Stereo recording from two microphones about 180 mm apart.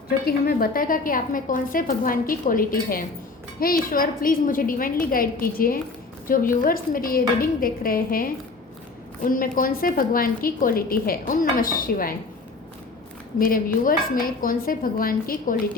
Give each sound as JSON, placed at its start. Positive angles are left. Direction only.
{"t": 0.3, "sound": "a woman's voice", "side_deg": 55}
{"t": 13.8, "sound": "a woman's voice", "side_deg": 50}